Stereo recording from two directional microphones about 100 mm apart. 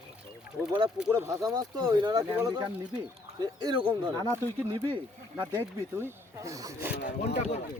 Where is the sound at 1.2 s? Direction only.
35° right (ahead or behind); by 4.3 s 50° right (ahead or behind).